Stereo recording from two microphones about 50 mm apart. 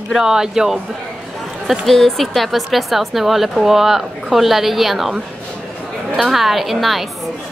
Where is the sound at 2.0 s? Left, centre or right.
Centre.